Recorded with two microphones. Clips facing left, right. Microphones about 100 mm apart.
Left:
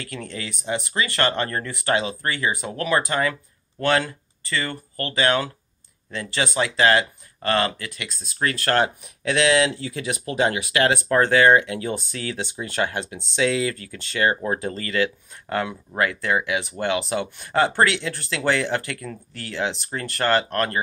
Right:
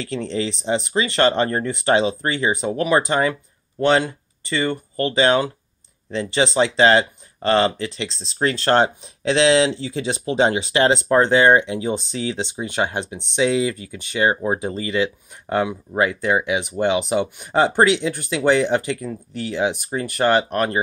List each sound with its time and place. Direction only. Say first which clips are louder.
0.0 s speech: right 9 dB; 25° right (ahead or behind)